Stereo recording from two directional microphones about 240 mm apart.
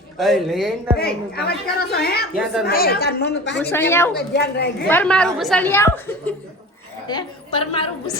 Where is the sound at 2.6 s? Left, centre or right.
Left.